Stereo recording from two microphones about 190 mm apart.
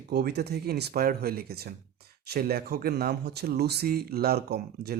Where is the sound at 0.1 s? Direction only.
60° right (ahead or behind).